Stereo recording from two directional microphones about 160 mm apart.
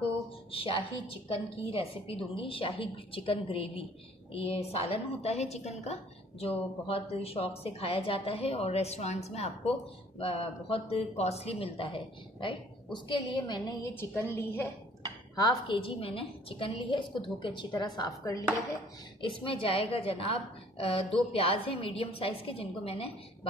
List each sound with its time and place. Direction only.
0.5 s a woman's voice: 35° left (ahead or behind); by 14.7 s 15° left (ahead or behind)
15.3 s a woman's voice: 25° left (ahead or behind)
19.2 s a woman's voice: 35° left (ahead or behind)